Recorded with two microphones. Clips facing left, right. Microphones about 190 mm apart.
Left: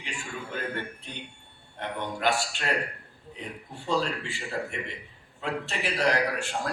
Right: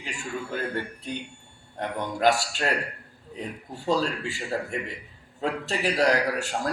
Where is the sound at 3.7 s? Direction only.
40° right (ahead or behind).